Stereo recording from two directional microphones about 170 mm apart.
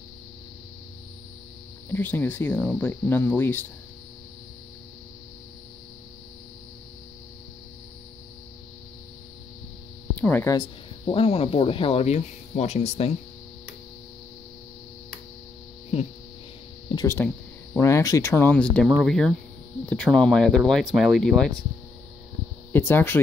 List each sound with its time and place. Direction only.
1.9 s speech: 10° left (ahead or behind)
10.1 s speech: 10° left (ahead or behind)
10.5 s speech: 25° left (ahead or behind)
16.9 s a sound: 20° left (ahead or behind)
17.7 s speech: 20° left (ahead or behind)
22.7 s speech: 10° left (ahead or behind)